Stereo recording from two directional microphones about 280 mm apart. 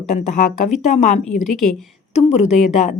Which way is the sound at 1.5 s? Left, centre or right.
Centre.